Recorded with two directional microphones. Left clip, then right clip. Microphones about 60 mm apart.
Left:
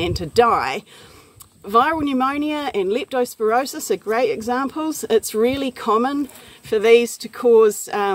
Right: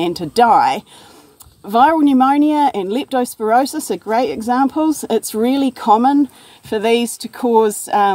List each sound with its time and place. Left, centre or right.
0.0 s speech: right
6.7 s speech: right